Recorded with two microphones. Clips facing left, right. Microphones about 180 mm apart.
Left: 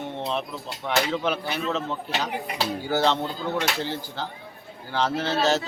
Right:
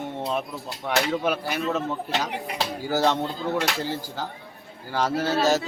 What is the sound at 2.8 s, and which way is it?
A man's voice, 10° right (ahead or behind).